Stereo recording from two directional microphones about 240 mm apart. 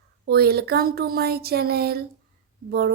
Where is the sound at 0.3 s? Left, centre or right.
Right.